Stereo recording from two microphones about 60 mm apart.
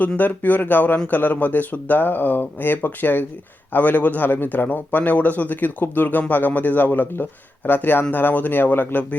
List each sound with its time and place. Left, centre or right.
0.2 s speech: left